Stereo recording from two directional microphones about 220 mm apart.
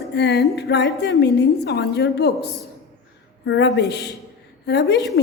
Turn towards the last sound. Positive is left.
turn(degrees=45)  # may be behind; listen again after turning